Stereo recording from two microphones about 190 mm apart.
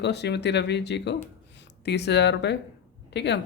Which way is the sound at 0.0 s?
60° left (ahead or behind).